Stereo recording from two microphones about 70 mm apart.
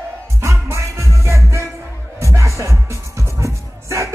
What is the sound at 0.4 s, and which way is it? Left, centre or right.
Music, right.